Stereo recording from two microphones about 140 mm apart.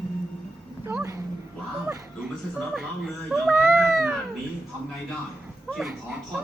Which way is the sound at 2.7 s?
Centre (ahead or behind).